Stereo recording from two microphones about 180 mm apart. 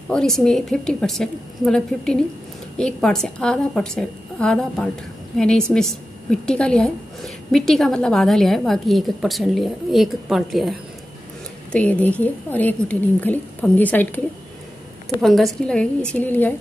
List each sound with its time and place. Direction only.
0.1 s a woman's voice: 5° left (ahead or behind)
15.2 s a woman's voice: centre (ahead or behind)